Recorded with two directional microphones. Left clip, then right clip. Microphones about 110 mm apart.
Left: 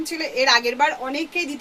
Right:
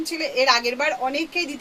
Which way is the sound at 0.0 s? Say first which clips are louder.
Even; 30° left (ahead or behind).